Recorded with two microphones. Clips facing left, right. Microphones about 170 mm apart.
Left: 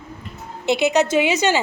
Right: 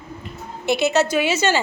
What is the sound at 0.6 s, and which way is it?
Speech, 15° left (ahead or behind).